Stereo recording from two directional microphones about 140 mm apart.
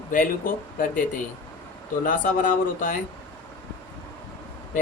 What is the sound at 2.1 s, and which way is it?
Speech, 75° left (ahead or behind).